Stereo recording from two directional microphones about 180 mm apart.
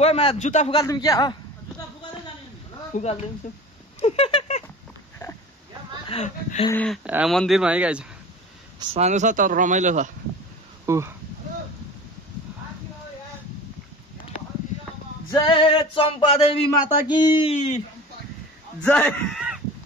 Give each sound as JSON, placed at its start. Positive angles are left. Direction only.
{"t": 0.0, "sound": "a man's voice", "side_deg": 30}
{"t": 0.7, "sound": "music", "side_deg": 20}
{"t": 2.9, "sound": "speech", "side_deg": 35}
{"t": 4.0, "sound": "cat", "side_deg": 35}
{"t": 6.0, "sound": "speech", "side_deg": 35}
{"t": 6.7, "sound": "speech", "side_deg": 5}
{"t": 7.1, "sound": "speech", "side_deg": -10}
{"t": 8.7, "sound": "speech", "side_deg": -35}
{"t": 10.9, "sound": "speech", "side_deg": -15}
{"t": 15.3, "sound": "music", "side_deg": 25}
{"t": 16.8, "sound": "speech", "side_deg": -10}
{"t": 17.3, "sound": "a man's voice", "side_deg": 30}
{"t": 18.8, "sound": "speech", "side_deg": 10}